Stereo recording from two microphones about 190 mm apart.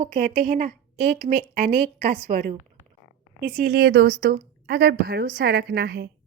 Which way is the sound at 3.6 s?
55° right (ahead or behind).